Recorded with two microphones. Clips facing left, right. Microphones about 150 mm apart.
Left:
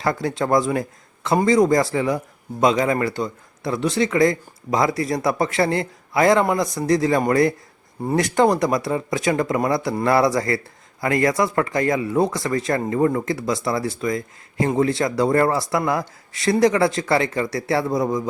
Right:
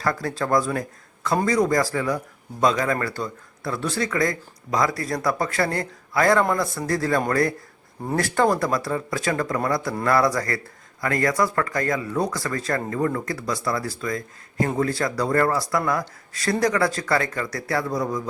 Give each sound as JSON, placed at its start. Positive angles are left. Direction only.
{"t": 0.0, "sound": "speech", "side_deg": 20}